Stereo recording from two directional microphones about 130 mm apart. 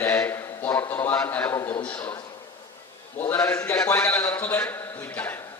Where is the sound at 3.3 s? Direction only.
15° left (ahead or behind).